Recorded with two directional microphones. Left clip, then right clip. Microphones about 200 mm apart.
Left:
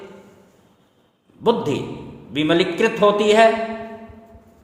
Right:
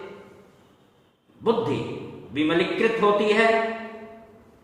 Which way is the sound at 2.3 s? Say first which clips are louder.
Left 4 dB; 55° left (ahead or behind).